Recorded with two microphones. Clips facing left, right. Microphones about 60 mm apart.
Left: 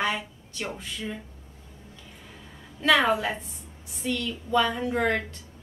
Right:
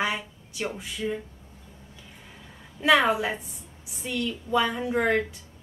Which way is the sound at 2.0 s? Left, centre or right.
Centre.